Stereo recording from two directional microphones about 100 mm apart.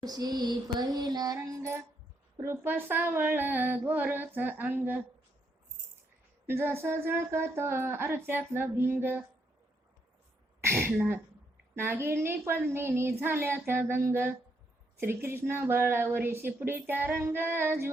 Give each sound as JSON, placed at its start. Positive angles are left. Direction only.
{"t": 0.0, "sound": "child singing", "side_deg": -40}
{"t": 2.4, "sound": "speech", "side_deg": -25}
{"t": 6.5, "sound": "speech", "side_deg": -25}
{"t": 10.6, "sound": "a sound", "side_deg": -25}
{"t": 10.9, "sound": "speech", "side_deg": -20}